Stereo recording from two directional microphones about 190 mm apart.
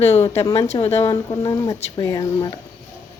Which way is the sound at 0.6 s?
35° left (ahead or behind).